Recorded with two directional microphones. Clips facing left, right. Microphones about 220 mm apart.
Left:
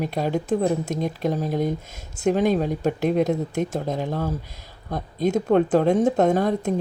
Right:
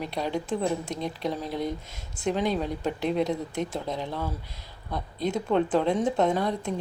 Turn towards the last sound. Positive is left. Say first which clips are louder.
# left 6 dB
turn(degrees=45)  # may be behind; listen again after turning